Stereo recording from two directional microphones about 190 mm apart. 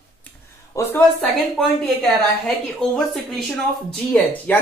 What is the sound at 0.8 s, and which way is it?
Speech, 15° left (ahead or behind).